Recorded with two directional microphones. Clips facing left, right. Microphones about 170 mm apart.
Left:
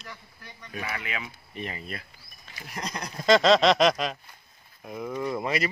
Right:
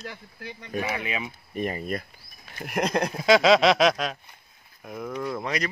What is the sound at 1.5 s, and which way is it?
Speech, 45° right (ahead or behind).